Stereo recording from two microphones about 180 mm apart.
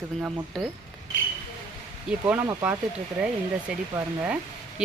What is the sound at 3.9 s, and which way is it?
Speech, 10° right (ahead or behind).